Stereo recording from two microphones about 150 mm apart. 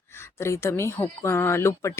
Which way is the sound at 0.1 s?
15° left (ahead or behind).